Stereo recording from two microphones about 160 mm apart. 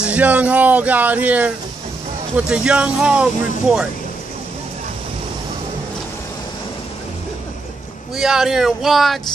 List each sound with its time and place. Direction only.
0.0 s speech: 10° right (ahead or behind)
8.2 s speech: 5° right (ahead or behind)